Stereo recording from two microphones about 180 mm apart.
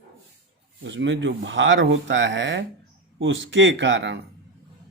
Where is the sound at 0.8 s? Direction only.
90° right.